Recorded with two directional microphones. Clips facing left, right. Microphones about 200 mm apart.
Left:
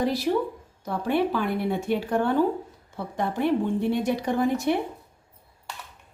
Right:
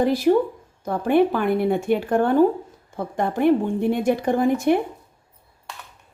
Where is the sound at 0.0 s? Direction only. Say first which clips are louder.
Right 6 dB; 50° right (ahead or behind).